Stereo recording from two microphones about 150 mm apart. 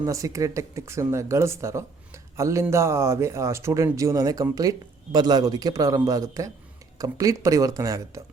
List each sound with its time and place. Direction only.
0.0 s speech: 20° right (ahead or behind)